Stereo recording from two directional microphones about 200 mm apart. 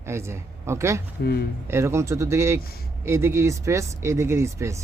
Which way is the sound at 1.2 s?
50° left (ahead or behind).